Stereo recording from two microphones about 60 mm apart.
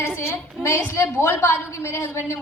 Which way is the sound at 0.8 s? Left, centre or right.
Left.